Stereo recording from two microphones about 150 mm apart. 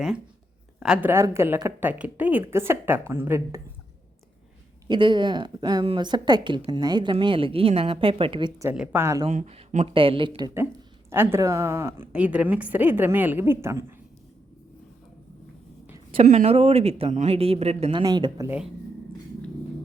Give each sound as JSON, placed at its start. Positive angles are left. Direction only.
{"t": 0.8, "sound": "a woman's voice", "side_deg": -5}
{"t": 1.1, "sound": "a woman's voice", "side_deg": -15}
{"t": 4.9, "sound": "a woman's voice", "side_deg": -30}
{"t": 8.7, "sound": "a woman's voice", "side_deg": -10}
{"t": 9.2, "sound": "a woman's voice", "side_deg": -45}
{"t": 11.1, "sound": "a woman's voice", "side_deg": -15}
{"t": 16.1, "sound": "speech", "side_deg": -50}
{"t": 17.9, "sound": "speech", "side_deg": -30}